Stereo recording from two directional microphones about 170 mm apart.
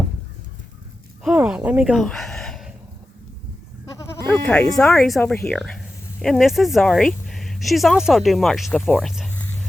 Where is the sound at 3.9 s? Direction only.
20° left (ahead or behind).